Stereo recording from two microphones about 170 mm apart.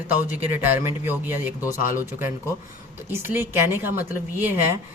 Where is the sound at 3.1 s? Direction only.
15° right (ahead or behind).